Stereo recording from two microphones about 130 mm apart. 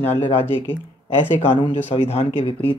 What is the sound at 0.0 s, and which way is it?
Speech, 15° left (ahead or behind).